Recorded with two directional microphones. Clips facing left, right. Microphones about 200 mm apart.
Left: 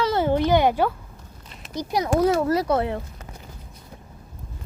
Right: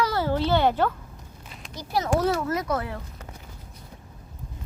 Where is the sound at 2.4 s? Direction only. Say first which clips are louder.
Left 6 dB; 35° left (ahead or behind).